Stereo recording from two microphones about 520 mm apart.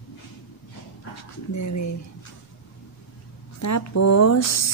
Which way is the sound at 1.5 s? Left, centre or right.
Left.